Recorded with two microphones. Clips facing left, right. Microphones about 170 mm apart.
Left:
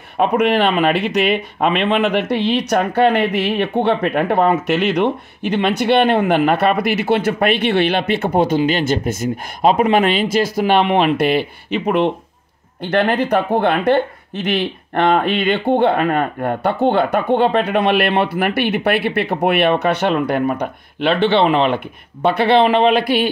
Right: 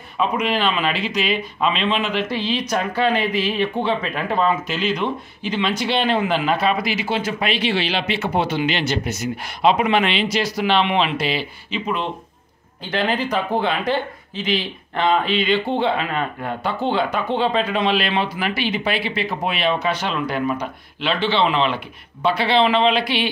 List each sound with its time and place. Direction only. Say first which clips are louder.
0.2 s speech: left 6 dB; 60° left (ahead or behind)
8.4 s speech: left 6 dB; 45° left (ahead or behind)